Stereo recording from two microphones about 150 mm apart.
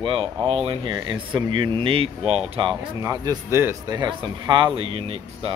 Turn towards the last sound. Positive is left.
turn(degrees=-40)  # may be behind; listen again after turning